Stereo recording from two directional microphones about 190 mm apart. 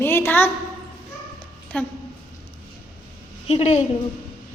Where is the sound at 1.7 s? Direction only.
5° left (ahead or behind).